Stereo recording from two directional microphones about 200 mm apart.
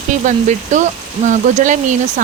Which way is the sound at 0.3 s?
40° right (ahead or behind).